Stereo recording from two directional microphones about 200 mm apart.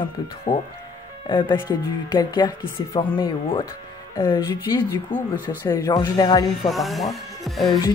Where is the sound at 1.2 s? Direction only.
25° left (ahead or behind).